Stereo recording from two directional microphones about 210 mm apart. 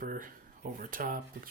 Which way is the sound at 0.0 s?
40° right (ahead or behind).